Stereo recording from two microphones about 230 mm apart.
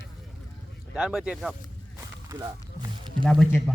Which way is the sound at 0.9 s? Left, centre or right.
Centre.